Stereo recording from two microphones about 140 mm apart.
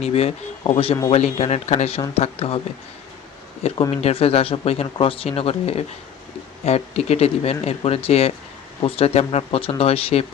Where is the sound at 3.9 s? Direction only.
45° left (ahead or behind).